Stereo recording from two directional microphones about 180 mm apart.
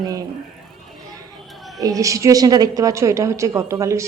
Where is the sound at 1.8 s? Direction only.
20° right (ahead or behind).